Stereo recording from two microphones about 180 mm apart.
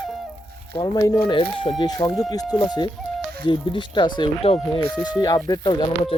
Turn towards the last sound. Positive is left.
turn(degrees=25)  # may be behind; listen again after turning